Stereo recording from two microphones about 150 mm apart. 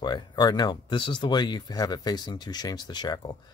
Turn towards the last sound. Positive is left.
turn(degrees=30)  # may be behind; listen again after turning